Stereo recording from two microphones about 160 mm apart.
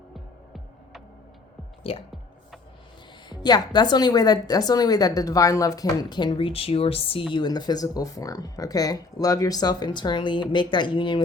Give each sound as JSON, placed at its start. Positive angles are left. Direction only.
{"t": 3.2, "sound": "a woman's voice", "side_deg": 25}